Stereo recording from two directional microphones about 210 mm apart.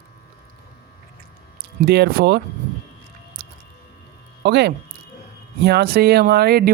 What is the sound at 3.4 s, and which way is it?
Squish, 50° right (ahead or behind).